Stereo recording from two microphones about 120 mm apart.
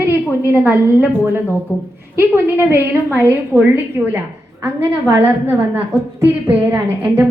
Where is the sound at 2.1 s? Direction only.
20° right (ahead or behind).